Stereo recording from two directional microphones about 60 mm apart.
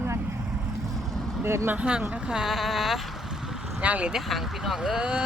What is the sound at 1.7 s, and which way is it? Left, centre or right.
Speech, centre.